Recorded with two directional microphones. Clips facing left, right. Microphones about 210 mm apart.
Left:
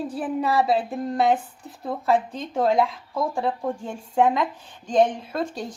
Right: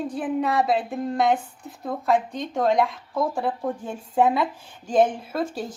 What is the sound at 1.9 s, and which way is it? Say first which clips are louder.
Speech: even; 5° left (ahead or behind).